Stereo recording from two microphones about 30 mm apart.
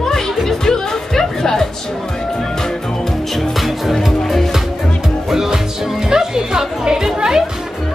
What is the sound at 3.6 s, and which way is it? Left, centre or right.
Music, centre.